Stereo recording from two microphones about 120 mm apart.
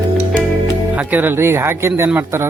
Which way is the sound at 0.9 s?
15° right (ahead or behind).